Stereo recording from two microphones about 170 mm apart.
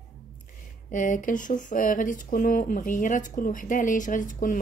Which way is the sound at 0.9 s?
50° left (ahead or behind).